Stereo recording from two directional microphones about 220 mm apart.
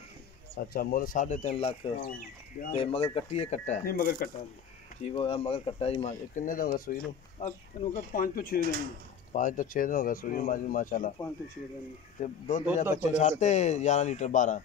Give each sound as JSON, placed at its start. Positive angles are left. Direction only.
{"t": 0.7, "sound": "speech", "side_deg": 40}
{"t": 5.0, "sound": "speech", "side_deg": 25}
{"t": 12.2, "sound": "speech", "side_deg": 35}